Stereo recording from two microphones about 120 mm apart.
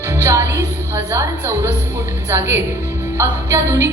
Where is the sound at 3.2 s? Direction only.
25° right (ahead or behind).